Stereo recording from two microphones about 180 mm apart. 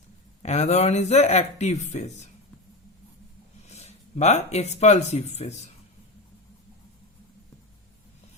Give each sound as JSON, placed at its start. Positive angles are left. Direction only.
{"t": 0.4, "sound": "speech", "side_deg": 40}
{"t": 3.7, "sound": "speech", "side_deg": 40}